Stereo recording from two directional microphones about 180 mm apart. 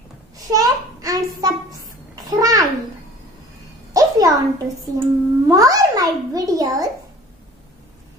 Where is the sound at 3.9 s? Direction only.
20° right (ahead or behind).